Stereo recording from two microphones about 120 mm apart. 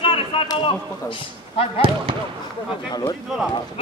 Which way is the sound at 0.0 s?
45° left (ahead or behind).